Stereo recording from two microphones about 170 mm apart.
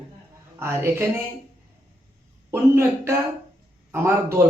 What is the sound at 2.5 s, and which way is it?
A man's voice, 15° right (ahead or behind).